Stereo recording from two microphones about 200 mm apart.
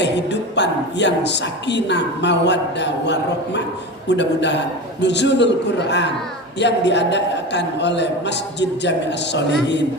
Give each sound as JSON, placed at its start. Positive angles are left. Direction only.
{"t": 0.0, "sound": "a woman's voice", "side_deg": 60}